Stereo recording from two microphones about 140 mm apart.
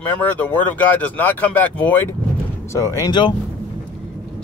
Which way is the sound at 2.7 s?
25° left (ahead or behind).